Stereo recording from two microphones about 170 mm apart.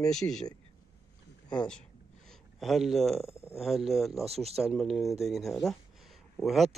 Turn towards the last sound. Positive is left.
turn(degrees=0)  # may be behind; listen again after turning